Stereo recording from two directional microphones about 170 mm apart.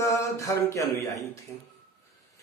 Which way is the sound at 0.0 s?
20° left (ahead or behind).